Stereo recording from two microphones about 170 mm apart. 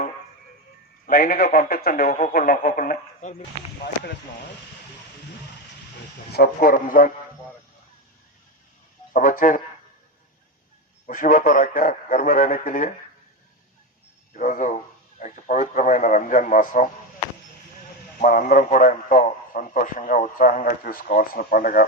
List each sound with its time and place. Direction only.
1.0 s a man's voice: 60° left (ahead or behind); by 3.4 s 45° left (ahead or behind)
6.3 s speech: 60° left (ahead or behind)
9.1 s a man's voice: 50° left (ahead or behind)
11.0 s a man's voice: 55° left (ahead or behind)
14.3 s a man's voice: 45° left (ahead or behind)
18.2 s a man's voice: 55° left (ahead or behind)